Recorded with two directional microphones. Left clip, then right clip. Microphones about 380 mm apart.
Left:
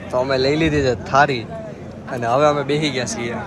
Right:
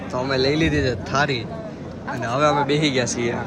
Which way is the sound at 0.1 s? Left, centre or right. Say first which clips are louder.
Left 3 dB; centre.